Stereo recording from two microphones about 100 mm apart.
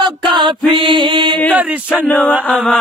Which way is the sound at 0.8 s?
55° right (ahead or behind).